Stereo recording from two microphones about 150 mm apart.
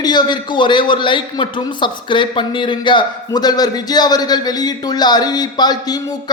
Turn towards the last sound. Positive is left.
turn(degrees=25)  # may be behind; listen again after turning